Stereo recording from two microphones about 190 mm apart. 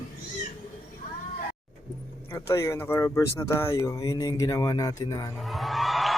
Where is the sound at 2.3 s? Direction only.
15° left (ahead or behind).